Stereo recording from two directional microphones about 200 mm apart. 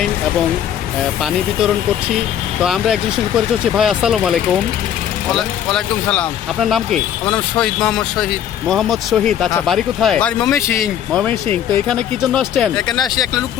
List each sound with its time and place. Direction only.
2.6 s speech: centre (ahead or behind)
12.9 s speech: 20° left (ahead or behind)